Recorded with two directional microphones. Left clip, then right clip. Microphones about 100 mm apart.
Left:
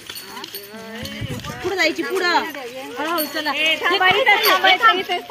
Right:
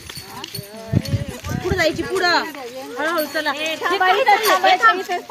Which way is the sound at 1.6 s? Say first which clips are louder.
Even; 50° left (ahead or behind).